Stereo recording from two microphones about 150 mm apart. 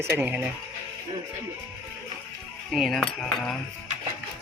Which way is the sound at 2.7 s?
Centre (ahead or behind).